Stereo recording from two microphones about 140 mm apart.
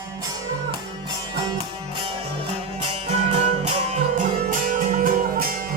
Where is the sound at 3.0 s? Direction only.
55° right (ahead or behind).